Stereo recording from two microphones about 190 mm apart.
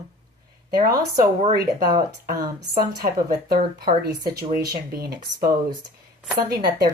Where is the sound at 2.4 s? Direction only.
20° right (ahead or behind).